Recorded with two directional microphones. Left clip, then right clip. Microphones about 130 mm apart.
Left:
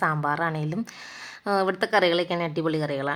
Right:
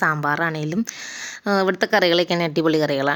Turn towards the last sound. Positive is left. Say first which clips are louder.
# right 7 dB
turn(degrees=-30)  # may be behind; listen again after turning